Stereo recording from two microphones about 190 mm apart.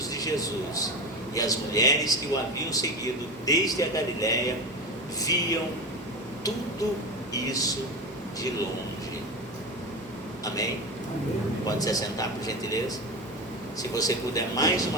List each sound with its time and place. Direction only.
0.1 s a man's voice: 20° left (ahead or behind)
7.3 s a man's voice: 20° left (ahead or behind)
10.4 s a man's voice: 20° left (ahead or behind)
11.8 s a man's voice: 20° left (ahead or behind)
13.9 s a man's voice: 20° left (ahead or behind)